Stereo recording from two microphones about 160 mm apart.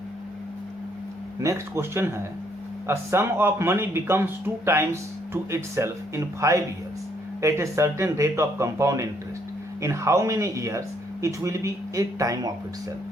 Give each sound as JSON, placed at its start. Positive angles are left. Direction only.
{"t": 1.4, "sound": "speech", "side_deg": -20}